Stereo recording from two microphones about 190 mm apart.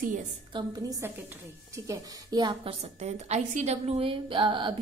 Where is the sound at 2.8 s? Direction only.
35° right (ahead or behind).